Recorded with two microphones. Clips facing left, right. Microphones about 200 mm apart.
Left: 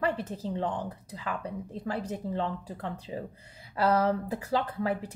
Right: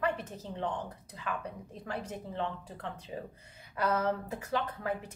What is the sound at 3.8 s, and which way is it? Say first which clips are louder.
A woman's voice: left 5 dB; 30° left (ahead or behind).